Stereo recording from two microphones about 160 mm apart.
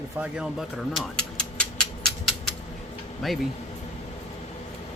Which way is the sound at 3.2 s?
Centre (ahead or behind).